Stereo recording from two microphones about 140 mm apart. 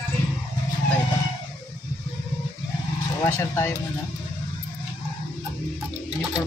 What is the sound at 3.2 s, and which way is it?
Speech, 15° left (ahead or behind).